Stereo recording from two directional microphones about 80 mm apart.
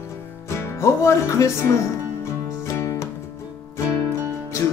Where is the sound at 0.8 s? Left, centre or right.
Left.